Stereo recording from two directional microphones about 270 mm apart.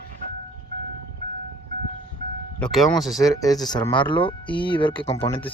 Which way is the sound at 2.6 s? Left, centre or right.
Centre.